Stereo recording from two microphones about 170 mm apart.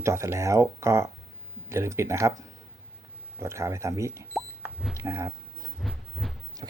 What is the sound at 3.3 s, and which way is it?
Speech, 15° right (ahead or behind).